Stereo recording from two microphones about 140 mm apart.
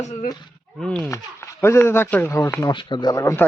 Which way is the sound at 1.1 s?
20° left (ahead or behind).